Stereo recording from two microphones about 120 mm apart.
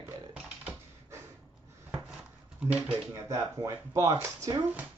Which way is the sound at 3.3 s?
25° right (ahead or behind).